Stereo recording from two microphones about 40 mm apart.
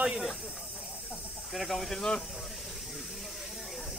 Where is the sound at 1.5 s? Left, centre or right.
Centre.